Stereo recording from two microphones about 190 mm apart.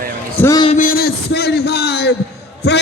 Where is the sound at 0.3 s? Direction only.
15° left (ahead or behind).